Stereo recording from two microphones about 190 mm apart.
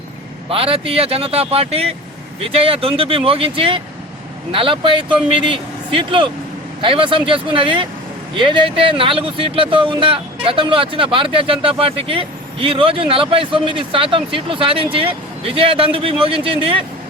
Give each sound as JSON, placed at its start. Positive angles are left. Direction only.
{"t": 0.4, "sound": "speech", "side_deg": -30}